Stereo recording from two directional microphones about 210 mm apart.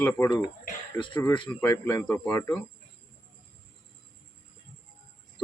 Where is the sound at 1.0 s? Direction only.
20° left (ahead or behind).